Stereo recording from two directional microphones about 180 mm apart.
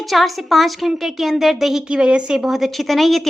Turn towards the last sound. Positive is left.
turn(degrees=0)  # may be behind; listen again after turning